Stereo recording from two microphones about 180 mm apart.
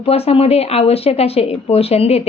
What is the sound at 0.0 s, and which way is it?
A woman's voice, 35° left (ahead or behind).